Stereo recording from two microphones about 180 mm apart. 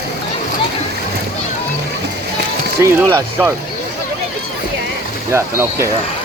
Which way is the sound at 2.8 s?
15° right (ahead or behind).